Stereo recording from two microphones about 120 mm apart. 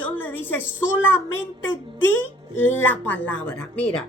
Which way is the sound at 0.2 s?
15° left (ahead or behind).